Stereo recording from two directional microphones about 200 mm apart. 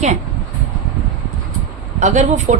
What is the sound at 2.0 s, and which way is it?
Speech, 35° right (ahead or behind).